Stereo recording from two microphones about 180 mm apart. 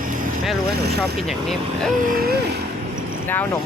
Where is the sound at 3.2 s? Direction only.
10° left (ahead or behind).